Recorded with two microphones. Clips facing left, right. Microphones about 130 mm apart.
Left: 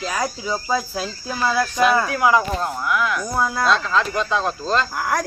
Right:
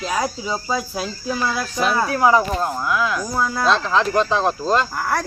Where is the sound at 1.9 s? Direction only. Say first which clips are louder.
Right 1 dB; 30° right (ahead or behind).